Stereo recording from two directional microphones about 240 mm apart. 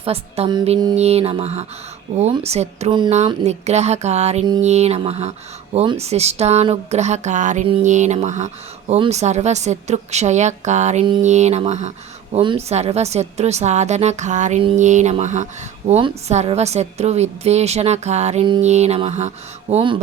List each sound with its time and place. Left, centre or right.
0.0 s a woman's voice: right